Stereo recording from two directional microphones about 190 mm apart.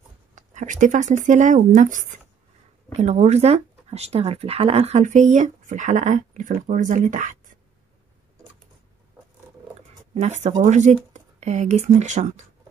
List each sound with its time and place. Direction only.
0.4 s speech: 40° right (ahead or behind)
10.1 s speech: 40° right (ahead or behind)